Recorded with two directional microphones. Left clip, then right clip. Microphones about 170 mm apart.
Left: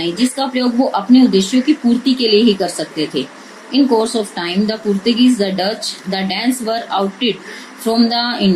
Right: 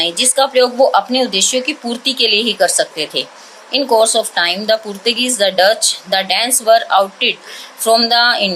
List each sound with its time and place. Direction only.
0.0 s speech: 50° right (ahead or behind)